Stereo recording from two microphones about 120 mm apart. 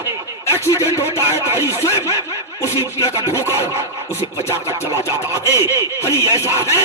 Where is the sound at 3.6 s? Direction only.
20° left (ahead or behind).